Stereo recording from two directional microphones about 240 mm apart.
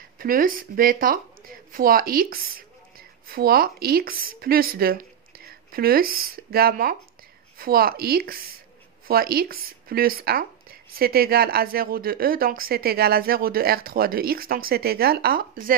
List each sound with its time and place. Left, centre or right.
0.2 s speech: right